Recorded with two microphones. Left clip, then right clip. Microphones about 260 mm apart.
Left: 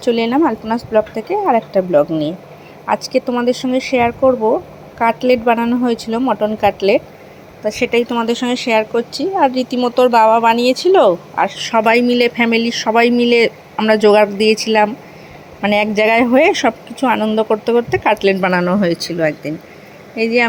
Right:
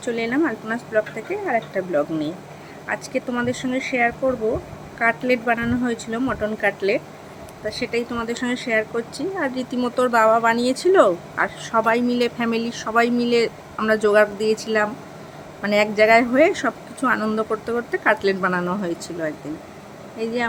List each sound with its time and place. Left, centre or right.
0.0 s a woman's voice: left
15.6 s a woman's voice: centre